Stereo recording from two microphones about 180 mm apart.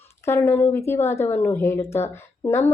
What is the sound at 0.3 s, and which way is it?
A woman's voice, 15° left (ahead or behind).